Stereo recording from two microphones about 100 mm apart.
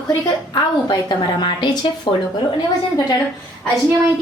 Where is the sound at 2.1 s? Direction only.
50° left (ahead or behind).